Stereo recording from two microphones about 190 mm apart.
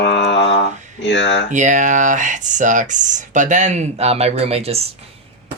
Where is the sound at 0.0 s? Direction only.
70° left (ahead or behind).